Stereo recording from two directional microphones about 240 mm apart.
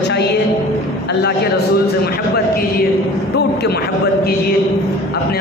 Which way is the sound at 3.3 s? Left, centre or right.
Left.